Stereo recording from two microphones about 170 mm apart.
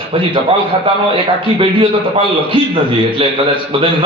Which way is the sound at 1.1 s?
30° right (ahead or behind).